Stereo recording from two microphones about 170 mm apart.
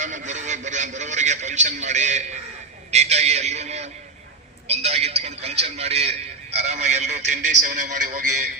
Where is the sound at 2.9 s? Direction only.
40° right (ahead or behind).